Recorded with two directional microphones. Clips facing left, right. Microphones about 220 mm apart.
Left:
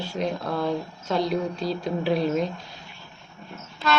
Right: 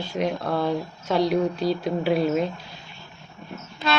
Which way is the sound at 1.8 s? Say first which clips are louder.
Left 1 dB; 5° right (ahead or behind).